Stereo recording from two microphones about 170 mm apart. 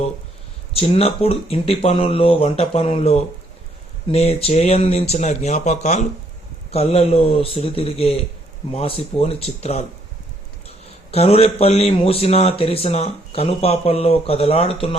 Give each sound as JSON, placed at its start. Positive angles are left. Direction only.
{"t": 0.7, "sound": "a man's voice", "side_deg": 35}
{"t": 11.1, "sound": "a man's voice", "side_deg": 35}